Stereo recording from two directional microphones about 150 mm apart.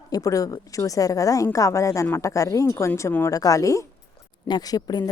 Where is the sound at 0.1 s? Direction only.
20° left (ahead or behind).